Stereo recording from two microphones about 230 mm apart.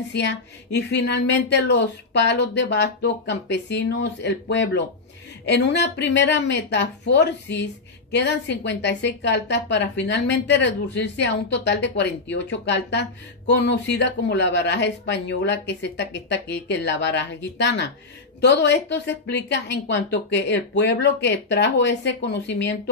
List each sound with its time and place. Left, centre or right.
0.1 s a woman's voice: left